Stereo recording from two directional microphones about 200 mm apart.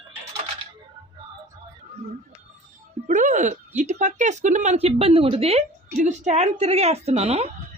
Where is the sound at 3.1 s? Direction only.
40° right (ahead or behind).